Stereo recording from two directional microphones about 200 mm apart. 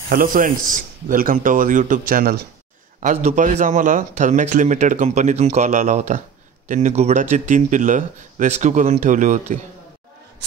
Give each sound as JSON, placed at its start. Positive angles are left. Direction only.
{"t": 0.1, "sound": "a man's voice", "side_deg": -45}